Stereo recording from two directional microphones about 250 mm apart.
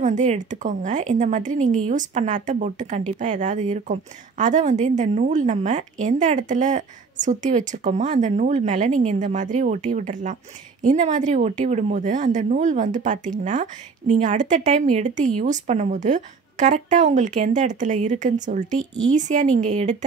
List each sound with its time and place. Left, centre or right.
0.0 s speech: right